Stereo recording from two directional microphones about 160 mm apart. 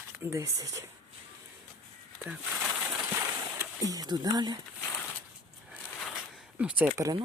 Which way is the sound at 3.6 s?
20° right (ahead or behind).